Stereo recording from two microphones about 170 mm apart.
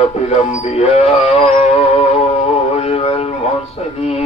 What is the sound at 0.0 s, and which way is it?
Speech, 35° left (ahead or behind).